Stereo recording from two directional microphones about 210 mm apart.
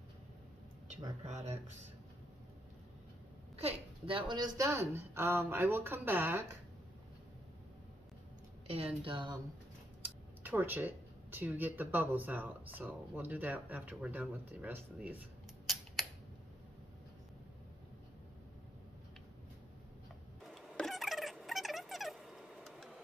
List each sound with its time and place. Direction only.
1.2 s speech: 30° right (ahead or behind)
3.5 s speech: 25° right (ahead or behind); by 6.4 s 10° right (ahead or behind)
8.6 s a woman's voice: 25° right (ahead or behind)
10.0 s speech: 10° right (ahead or behind)
20.4 s a sound: centre (ahead or behind)